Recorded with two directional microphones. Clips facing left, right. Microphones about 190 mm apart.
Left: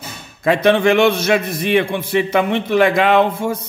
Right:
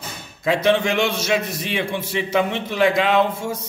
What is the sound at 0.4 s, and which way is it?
A man's voice, 55° left (ahead or behind).